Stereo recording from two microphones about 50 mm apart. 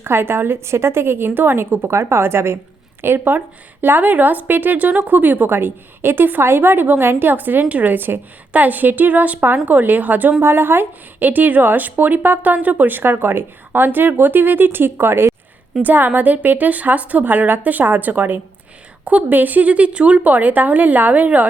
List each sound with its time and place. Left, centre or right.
0.0 s a woman's voice: right
3.0 s a woman's voice: right
5.5 s a woman's voice: right
10.4 s a woman's voice: right
15.8 s a woman's voice: right